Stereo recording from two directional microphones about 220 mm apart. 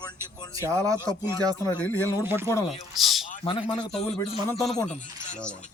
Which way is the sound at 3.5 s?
25° left (ahead or behind).